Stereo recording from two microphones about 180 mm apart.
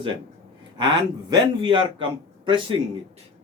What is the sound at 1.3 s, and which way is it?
Speech, 25° right (ahead or behind).